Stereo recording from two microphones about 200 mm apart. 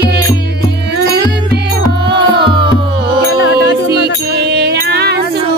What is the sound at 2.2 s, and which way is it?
Music, 25° right (ahead or behind).